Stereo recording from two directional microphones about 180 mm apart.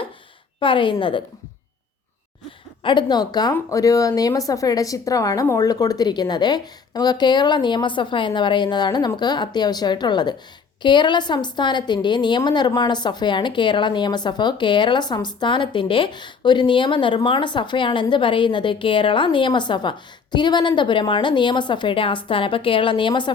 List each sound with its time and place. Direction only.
0.6 s a woman's voice: 30° left (ahead or behind)
2.8 s a woman's voice: 25° left (ahead or behind)